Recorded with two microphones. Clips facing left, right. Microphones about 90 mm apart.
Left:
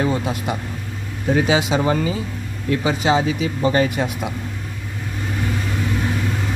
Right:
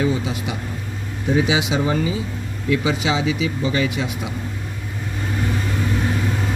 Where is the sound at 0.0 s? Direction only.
55° left (ahead or behind).